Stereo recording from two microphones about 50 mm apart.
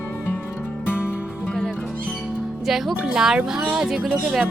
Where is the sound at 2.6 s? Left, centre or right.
Centre.